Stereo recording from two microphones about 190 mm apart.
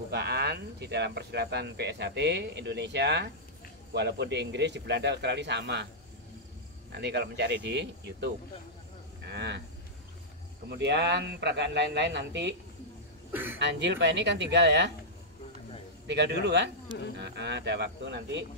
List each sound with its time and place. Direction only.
0.1 s speech: 60° right (ahead or behind)
6.9 s speech: 60° right (ahead or behind)
9.3 s speech: 65° right (ahead or behind)
10.8 s speech: 65° right (ahead or behind)
13.3 s speech: 10° right (ahead or behind)
13.6 s speech: 65° right (ahead or behind)
16.1 s speech: 65° right (ahead or behind)